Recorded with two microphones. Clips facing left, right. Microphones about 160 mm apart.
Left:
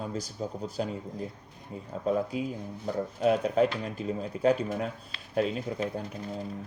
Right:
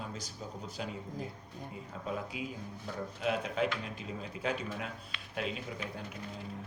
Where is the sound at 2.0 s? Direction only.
40° left (ahead or behind).